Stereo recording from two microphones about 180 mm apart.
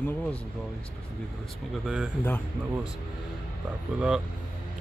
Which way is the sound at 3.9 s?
5° right (ahead or behind).